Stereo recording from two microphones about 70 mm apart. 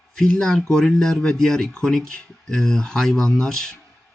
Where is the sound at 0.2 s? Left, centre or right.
Centre.